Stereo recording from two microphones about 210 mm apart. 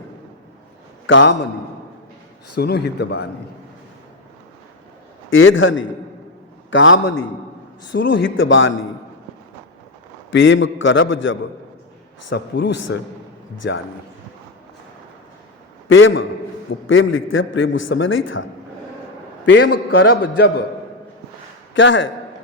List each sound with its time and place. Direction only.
1.0 s a man's voice: 65° left (ahead or behind)
2.6 s a man's voice: 50° left (ahead or behind)
5.3 s a man's voice: 70° left (ahead or behind)
10.3 s a man's voice: 65° left (ahead or behind)
15.9 s a man's voice: 65° left (ahead or behind)
19.5 s a man's voice: 60° left (ahead or behind)
21.7 s a man's voice: 60° left (ahead or behind)